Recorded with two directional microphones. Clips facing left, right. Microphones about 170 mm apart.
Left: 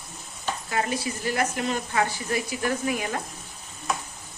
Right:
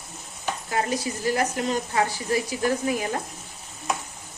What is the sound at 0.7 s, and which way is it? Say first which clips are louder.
Speech: right 2 dB; 35° right (ahead or behind).